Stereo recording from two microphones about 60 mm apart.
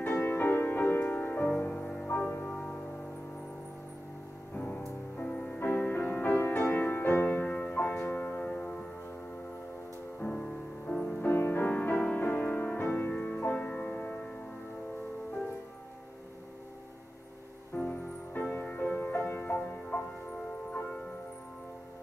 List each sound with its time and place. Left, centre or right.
0.0 s music: left
2.1 s music: left
4.6 s music: left
10.1 s music: left
10.4 s music: centre
11.2 s music: left
11.6 s music: left
17.7 s music: left